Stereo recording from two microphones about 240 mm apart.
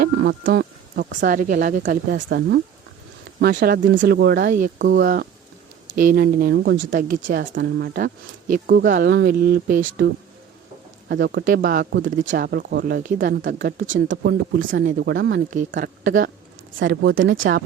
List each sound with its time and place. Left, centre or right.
0.0 s speech: right
1.4 s speech: right
1.8 s a woman's voice: right
6.9 s speech: right
7.9 s speech: right
11.1 s a woman's voice: right
15.4 s a woman's voice: right